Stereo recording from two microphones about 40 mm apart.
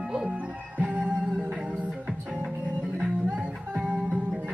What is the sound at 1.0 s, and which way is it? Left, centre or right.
Music, right.